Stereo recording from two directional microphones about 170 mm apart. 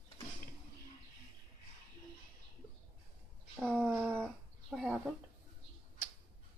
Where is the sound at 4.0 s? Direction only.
10° right (ahead or behind).